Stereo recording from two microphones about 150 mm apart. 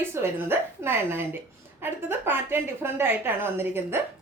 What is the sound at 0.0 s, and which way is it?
A woman's voice, 15° right (ahead or behind).